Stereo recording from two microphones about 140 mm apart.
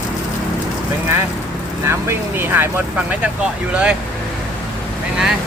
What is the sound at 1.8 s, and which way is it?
Speech, 20° right (ahead or behind).